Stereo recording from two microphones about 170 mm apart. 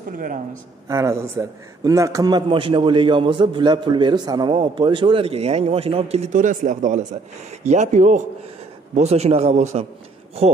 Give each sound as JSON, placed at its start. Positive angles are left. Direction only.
{"t": 0.8, "sound": "a man's voice", "side_deg": -15}